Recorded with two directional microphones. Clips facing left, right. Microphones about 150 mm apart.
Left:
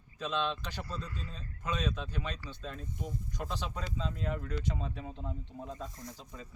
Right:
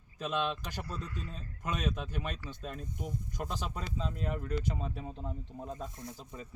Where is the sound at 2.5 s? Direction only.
10° right (ahead or behind).